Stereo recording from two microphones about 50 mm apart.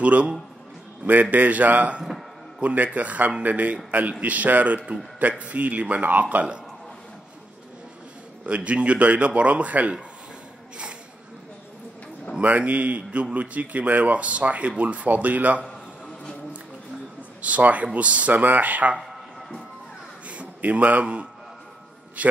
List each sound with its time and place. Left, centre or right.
0.0 s a man's voice: right
8.5 s a man's voice: right
12.4 s a man's voice: right
17.4 s a man's voice: right
20.2 s a man's voice: right